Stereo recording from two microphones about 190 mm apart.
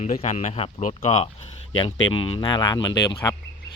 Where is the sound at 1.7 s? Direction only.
25° left (ahead or behind).